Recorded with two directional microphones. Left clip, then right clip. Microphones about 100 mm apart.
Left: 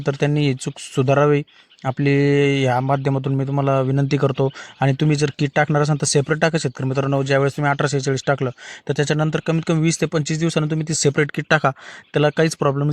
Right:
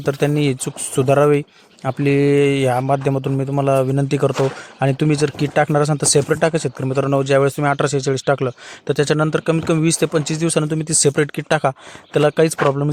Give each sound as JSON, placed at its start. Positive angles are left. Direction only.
{"t": 0.0, "sound": "speech", "side_deg": -40}
{"t": 11.4, "sound": "speech", "side_deg": -25}
{"t": 12.1, "sound": "speech", "side_deg": -35}